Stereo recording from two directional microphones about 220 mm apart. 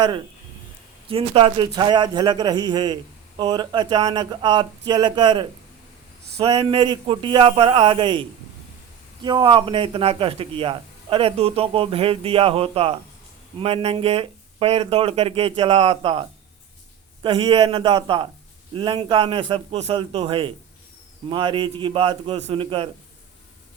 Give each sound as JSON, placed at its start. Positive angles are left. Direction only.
{"t": 1.0, "sound": "a man's voice", "side_deg": -25}
{"t": 9.2, "sound": "a man's voice", "side_deg": -20}
{"t": 17.2, "sound": "a man's voice", "side_deg": -20}